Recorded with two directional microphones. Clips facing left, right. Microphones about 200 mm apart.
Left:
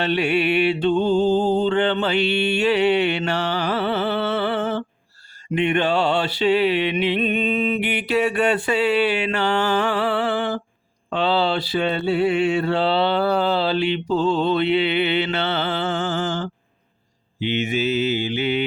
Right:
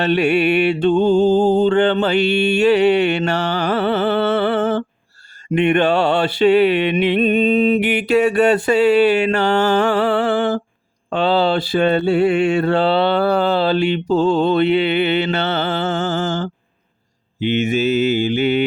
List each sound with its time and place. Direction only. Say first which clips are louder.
0.0 s mantra: right 5 dB; 50° right (ahead or behind)